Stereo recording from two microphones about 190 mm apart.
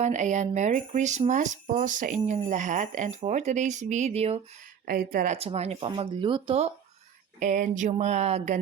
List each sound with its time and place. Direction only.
0.0 s speech: 40° right (ahead or behind)
4.9 s speech: 50° right (ahead or behind); by 6.7 s 30° right (ahead or behind)
7.3 s speech: 40° right (ahead or behind)